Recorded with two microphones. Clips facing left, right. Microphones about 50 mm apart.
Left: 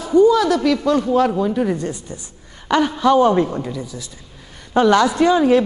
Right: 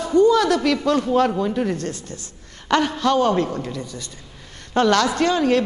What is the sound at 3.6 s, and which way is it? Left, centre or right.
A woman's voice, centre.